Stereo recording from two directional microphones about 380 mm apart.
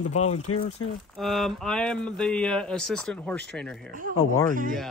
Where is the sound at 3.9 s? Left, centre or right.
Right.